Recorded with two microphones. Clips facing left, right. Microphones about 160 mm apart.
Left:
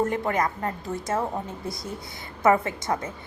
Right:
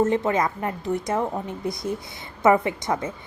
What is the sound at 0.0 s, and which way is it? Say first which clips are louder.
A woman's voice: right 3 dB; 20° right (ahead or behind).